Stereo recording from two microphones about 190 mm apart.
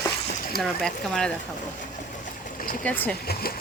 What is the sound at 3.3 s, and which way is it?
Speech, 55° left (ahead or behind).